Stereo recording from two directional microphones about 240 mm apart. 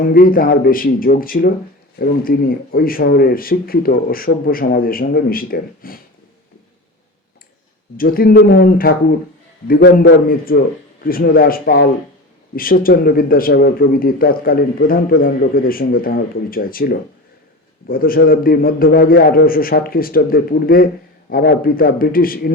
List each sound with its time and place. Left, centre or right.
0.1 s speech: left
7.9 s speech: left